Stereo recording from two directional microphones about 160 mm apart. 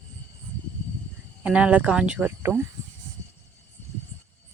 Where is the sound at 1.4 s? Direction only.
10° right (ahead or behind).